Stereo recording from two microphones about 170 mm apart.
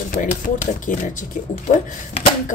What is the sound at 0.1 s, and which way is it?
Speech, 50° left (ahead or behind).